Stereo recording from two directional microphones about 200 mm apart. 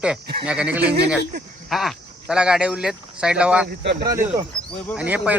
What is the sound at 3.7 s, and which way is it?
Speech, 50° right (ahead or behind).